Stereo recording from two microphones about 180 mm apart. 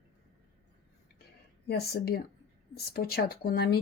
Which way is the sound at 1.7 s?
60° left (ahead or behind).